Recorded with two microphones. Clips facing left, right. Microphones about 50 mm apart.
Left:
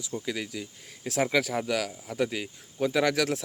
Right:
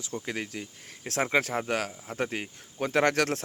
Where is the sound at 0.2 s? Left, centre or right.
Right.